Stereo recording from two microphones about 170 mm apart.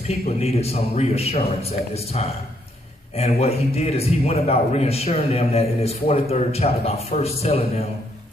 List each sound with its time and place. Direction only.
0.4 s a man's voice: 35° left (ahead or behind)